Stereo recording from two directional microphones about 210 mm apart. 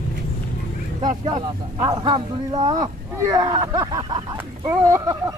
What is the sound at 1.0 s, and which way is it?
Speech, 20° right (ahead or behind).